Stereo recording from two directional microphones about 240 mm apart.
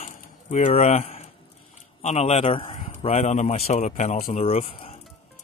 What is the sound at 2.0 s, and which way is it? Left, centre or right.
A man's voice, left.